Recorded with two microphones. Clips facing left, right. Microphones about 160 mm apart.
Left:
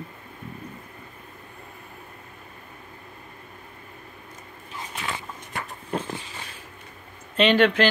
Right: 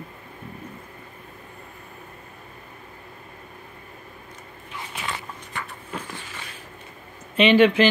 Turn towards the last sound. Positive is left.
turn(degrees=-10)  # may be behind; listen again after turning